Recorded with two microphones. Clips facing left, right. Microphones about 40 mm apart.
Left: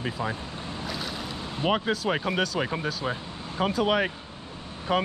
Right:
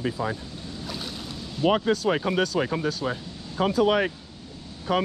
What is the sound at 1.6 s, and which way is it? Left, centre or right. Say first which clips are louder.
Speech: right 4 dB; centre.